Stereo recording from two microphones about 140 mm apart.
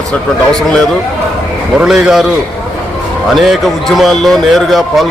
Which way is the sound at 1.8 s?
5° right (ahead or behind).